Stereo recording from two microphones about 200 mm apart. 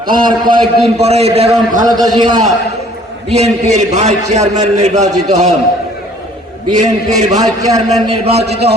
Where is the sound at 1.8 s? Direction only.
20° right (ahead or behind).